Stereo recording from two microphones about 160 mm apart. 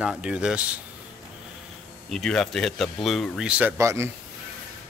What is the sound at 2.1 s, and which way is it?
Speech, centre (ahead or behind).